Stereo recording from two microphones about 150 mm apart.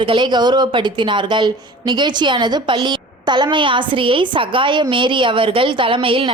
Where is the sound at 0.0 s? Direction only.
30° right (ahead or behind).